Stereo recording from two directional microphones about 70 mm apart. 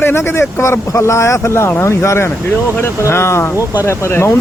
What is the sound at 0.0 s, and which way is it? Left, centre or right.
Speech, left.